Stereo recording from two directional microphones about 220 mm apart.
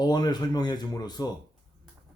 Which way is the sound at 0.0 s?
20° left (ahead or behind).